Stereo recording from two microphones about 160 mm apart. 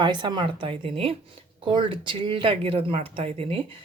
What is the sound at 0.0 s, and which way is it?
Speech, 30° right (ahead or behind).